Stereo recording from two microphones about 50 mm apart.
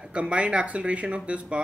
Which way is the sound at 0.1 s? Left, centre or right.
Right.